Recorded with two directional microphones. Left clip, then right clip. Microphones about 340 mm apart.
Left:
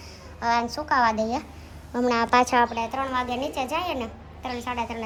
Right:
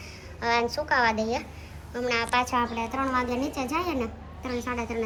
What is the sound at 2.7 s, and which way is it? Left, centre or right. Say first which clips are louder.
A woman's voice: left 1 dB; centre.